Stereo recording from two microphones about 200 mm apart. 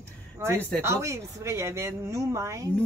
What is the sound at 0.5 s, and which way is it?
Speech, 10° left (ahead or behind).